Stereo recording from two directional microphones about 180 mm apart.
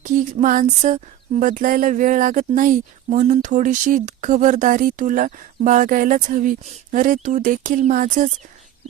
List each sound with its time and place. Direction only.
0.4 s speech: 45° right (ahead or behind)